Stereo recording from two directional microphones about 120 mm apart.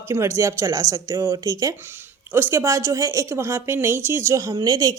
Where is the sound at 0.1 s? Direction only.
25° right (ahead or behind).